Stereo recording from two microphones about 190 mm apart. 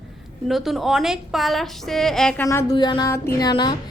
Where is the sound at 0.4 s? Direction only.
Centre (ahead or behind).